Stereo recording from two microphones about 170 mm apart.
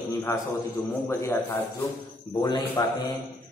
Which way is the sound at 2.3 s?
25° left (ahead or behind).